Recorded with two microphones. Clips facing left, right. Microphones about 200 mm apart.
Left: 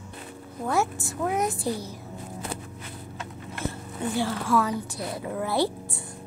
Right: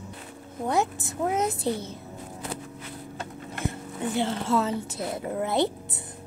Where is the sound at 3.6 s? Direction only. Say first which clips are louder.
Even; 20° right (ahead or behind).